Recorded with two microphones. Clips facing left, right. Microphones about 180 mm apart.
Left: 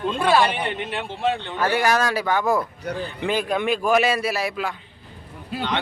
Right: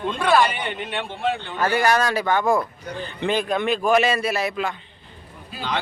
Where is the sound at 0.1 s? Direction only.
5° left (ahead or behind).